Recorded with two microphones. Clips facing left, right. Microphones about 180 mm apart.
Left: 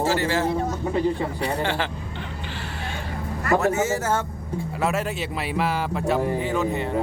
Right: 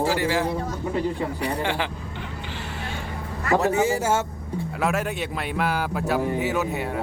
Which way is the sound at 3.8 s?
10° right (ahead or behind).